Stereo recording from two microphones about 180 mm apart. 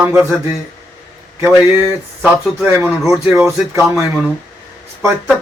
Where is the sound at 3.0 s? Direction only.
15° right (ahead or behind).